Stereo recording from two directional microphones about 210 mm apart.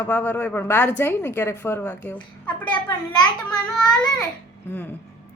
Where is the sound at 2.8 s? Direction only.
20° left (ahead or behind).